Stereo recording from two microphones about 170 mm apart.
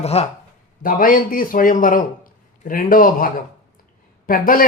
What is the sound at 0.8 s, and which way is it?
Speech, 55° left (ahead or behind).